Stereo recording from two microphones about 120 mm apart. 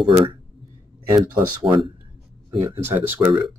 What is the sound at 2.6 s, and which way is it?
Speech, 20° right (ahead or behind).